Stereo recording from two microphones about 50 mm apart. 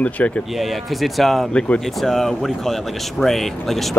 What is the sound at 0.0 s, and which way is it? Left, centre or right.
Speech, left.